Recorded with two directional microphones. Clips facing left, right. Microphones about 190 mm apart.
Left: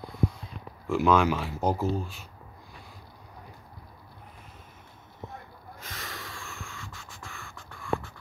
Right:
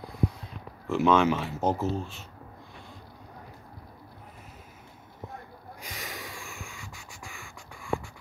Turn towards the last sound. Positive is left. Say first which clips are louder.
# left 1 dB
turn(degrees=-15)  # may be behind; listen again after turning